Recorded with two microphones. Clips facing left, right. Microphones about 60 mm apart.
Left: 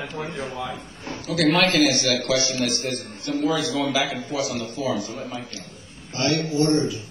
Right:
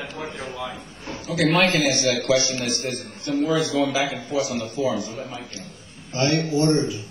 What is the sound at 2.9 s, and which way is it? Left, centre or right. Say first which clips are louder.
Speech: left 1 dB; centre.